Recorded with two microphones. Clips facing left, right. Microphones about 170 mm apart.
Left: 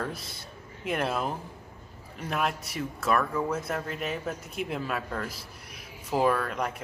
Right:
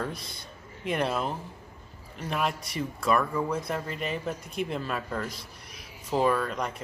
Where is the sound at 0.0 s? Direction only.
5° left (ahead or behind).